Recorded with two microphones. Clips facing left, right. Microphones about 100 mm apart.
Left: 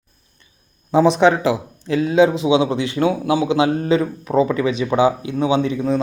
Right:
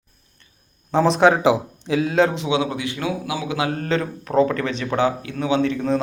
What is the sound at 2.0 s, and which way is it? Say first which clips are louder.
A man's voice: left 6 dB; 5° left (ahead or behind).